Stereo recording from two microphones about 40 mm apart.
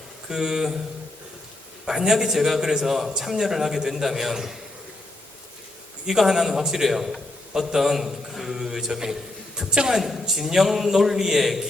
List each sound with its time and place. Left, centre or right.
0.3 s a man's voice: centre
1.9 s a man's voice: centre
6.1 s a man's voice: centre
10.0 s a man's voice: centre